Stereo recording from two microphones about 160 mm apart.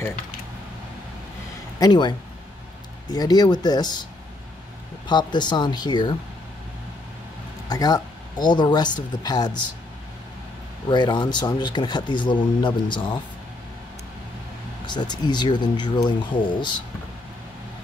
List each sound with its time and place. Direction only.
1.8 s speech: 25° left (ahead or behind)
7.7 s speech: 25° left (ahead or behind)
10.9 s speech: 30° left (ahead or behind)
14.9 s speech: 25° left (ahead or behind)